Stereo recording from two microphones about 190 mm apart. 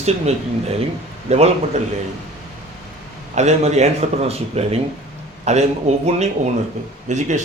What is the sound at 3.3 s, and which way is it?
Speech, 35° right (ahead or behind).